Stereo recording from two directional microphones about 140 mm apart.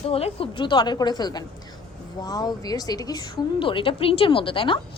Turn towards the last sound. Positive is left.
turn(degrees=40)  # may be behind; listen again after turning